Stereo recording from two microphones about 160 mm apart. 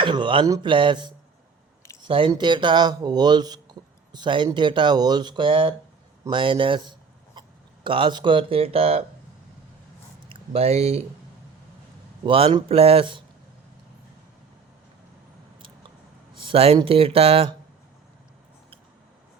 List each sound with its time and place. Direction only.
0.0 s a man's voice: 30° right (ahead or behind)
7.4 s a sound: 30° right (ahead or behind)
7.9 s speech: 30° right (ahead or behind)
10.2 s speech: 35° right (ahead or behind)
12.2 s speech: 35° right (ahead or behind)
16.5 s speech: 40° right (ahead or behind)